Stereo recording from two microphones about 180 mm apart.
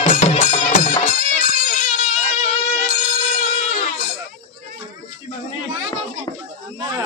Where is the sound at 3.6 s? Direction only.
35° left (ahead or behind).